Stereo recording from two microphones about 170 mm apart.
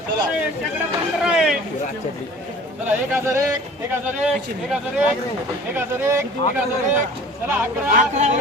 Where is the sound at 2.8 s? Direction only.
15° right (ahead or behind).